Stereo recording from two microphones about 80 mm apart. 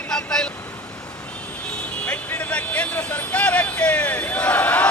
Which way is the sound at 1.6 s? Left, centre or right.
Centre.